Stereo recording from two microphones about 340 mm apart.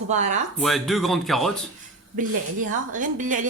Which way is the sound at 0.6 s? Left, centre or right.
Centre.